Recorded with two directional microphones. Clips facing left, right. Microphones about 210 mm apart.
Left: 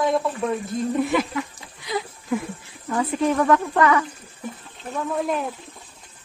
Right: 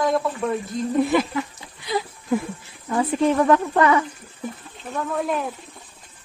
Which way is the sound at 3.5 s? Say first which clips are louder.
Right 1 dB; 25° right (ahead or behind).